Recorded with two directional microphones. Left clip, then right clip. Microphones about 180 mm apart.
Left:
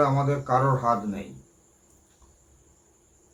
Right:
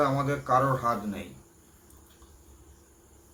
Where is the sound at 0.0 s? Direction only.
10° right (ahead or behind).